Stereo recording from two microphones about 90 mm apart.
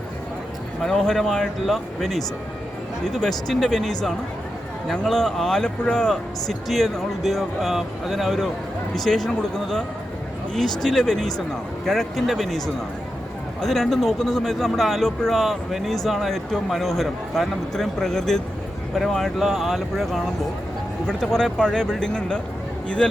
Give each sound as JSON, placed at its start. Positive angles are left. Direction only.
{"t": 0.9, "sound": "speech", "side_deg": 5}